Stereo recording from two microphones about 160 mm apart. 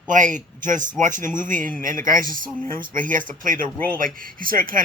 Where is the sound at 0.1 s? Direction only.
55° right (ahead or behind).